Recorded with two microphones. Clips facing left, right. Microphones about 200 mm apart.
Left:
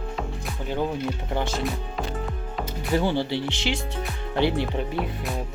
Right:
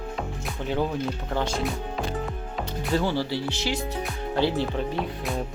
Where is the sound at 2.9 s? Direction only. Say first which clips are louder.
Left 2 dB; 20° left (ahead or behind).